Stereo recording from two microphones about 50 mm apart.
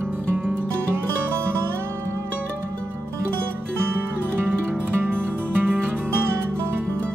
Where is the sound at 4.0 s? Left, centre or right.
Right.